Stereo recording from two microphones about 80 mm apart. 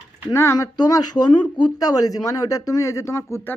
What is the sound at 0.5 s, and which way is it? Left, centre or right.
Speech, left.